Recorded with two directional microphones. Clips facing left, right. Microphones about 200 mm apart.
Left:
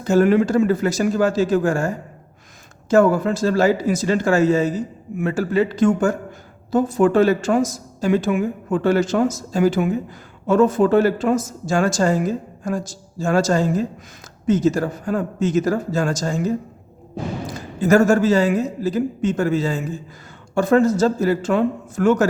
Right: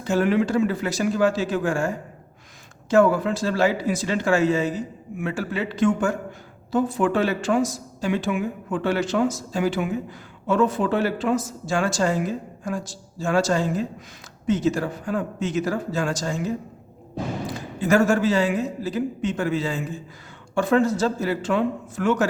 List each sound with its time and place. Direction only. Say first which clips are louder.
0.0 s speech: left 5 dB; 45° left (ahead or behind)
17.7 s speech: left 4 dB; 45° left (ahead or behind)